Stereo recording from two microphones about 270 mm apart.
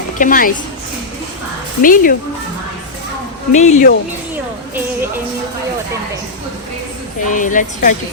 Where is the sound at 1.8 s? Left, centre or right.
Left.